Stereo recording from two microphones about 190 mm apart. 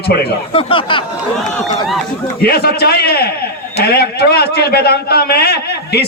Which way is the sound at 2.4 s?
55° left (ahead or behind).